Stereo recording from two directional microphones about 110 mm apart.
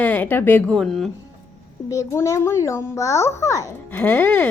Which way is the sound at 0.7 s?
5° left (ahead or behind).